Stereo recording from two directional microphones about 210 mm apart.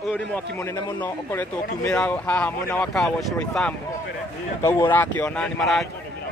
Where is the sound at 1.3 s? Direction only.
5° left (ahead or behind).